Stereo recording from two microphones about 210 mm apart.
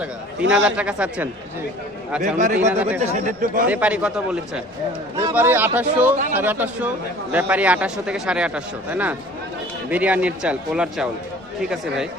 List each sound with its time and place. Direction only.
0.5 s a man's voice: 5° right (ahead or behind)
2.2 s speech: 35° right (ahead or behind)
3.7 s a man's voice: 5° right (ahead or behind)